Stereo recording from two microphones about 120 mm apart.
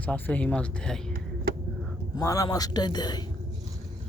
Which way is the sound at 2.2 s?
30° left (ahead or behind).